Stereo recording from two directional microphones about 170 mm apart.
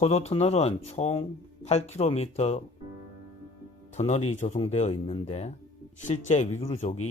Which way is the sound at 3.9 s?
40° left (ahead or behind).